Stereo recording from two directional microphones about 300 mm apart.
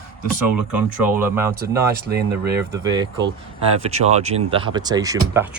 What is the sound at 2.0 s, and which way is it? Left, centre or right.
Speech, right.